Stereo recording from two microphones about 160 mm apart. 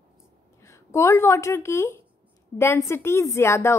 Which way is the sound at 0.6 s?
15° left (ahead or behind).